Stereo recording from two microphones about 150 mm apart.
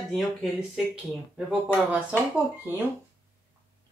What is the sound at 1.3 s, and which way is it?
Speech, 5° right (ahead or behind).